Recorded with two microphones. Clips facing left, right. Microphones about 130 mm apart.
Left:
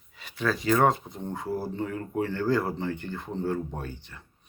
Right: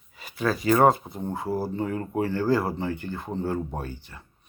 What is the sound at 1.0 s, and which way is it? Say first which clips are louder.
Speech: right 3 dB; 25° right (ahead or behind).